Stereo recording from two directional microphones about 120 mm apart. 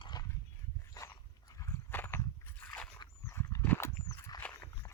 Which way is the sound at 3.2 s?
20° left (ahead or behind).